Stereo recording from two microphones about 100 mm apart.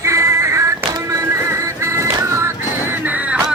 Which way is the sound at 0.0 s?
30° right (ahead or behind).